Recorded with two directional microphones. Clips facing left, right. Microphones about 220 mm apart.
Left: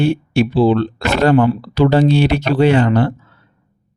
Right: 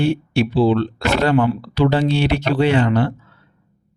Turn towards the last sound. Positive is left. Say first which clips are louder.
# left 3 dB
turn(degrees=45)  # may be behind; listen again after turning